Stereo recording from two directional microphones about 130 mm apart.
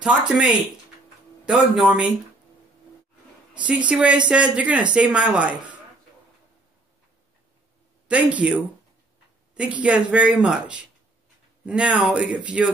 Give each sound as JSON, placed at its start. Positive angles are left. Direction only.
{"t": 0.0, "sound": "speech", "side_deg": -5}
{"t": 3.5, "sound": "speech", "side_deg": -10}
{"t": 8.1, "sound": "speech", "side_deg": -10}